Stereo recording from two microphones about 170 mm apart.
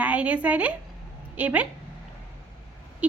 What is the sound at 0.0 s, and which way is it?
A woman's voice, 10° right (ahead or behind).